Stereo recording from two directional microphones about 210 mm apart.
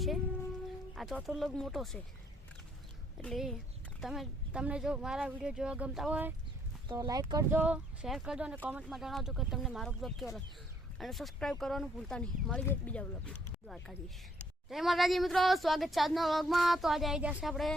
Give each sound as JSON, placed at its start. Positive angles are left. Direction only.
{"t": 0.9, "sound": "speech", "side_deg": 0}
{"t": 3.2, "sound": "speech", "side_deg": 0}
{"t": 6.8, "sound": "speech", "side_deg": -20}
{"t": 7.6, "sound": "speech", "side_deg": -5}